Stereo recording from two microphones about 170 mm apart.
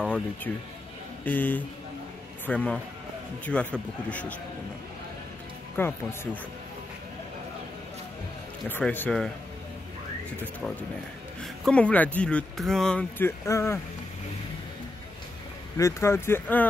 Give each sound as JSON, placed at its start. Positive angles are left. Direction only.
{"t": 0.0, "sound": "speech", "side_deg": 5}
{"t": 5.8, "sound": "speech", "side_deg": 10}
{"t": 8.6, "sound": "speech", "side_deg": 10}
{"t": 11.4, "sound": "speech", "side_deg": 5}
{"t": 13.5, "sound": "speech", "side_deg": 15}
{"t": 15.8, "sound": "speech", "side_deg": 15}